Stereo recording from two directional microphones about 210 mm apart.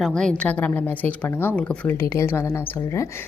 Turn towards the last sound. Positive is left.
turn(degrees=10)  # may be behind; listen again after turning